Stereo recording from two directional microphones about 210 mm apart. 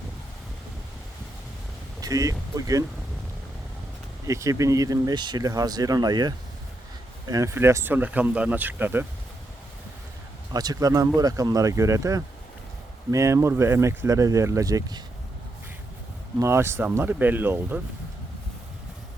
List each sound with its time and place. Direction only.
2.0 s speech: 15° right (ahead or behind)
4.3 s speech: 15° right (ahead or behind)
10.5 s speech: 20° right (ahead or behind)
16.4 s speech: 10° right (ahead or behind)